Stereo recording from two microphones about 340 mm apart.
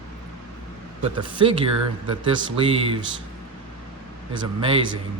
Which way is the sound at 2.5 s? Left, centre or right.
Centre.